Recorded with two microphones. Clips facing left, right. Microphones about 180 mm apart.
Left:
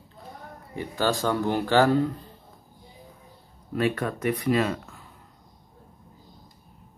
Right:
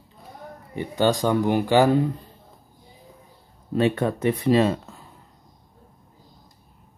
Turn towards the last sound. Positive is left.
turn(degrees=-25)  # may be behind; listen again after turning